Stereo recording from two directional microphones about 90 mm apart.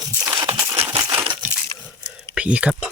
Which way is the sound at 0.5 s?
30° right (ahead or behind).